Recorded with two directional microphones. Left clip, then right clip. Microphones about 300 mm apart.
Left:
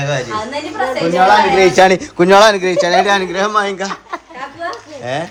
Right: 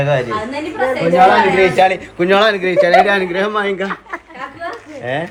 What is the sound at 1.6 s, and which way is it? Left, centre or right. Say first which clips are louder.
Speech: left 2 dB; left.